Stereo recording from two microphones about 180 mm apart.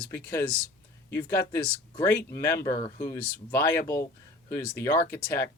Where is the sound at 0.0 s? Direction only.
15° left (ahead or behind).